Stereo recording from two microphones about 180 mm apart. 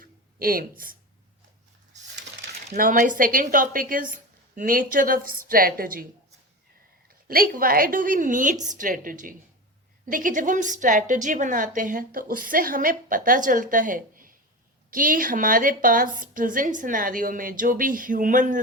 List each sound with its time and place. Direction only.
0.0 s a sound: 55° right (ahead or behind)
0.8 s a woman's voice: 50° right (ahead or behind)
2.4 s a woman's voice: 50° right (ahead or behind)
7.3 s a woman's voice: 55° right (ahead or behind)